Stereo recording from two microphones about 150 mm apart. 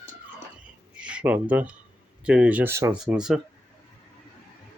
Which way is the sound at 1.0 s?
10° right (ahead or behind).